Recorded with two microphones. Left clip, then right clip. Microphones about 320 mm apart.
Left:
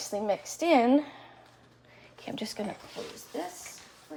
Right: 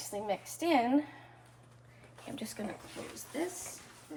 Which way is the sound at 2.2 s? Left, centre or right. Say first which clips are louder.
Left 6 dB; left.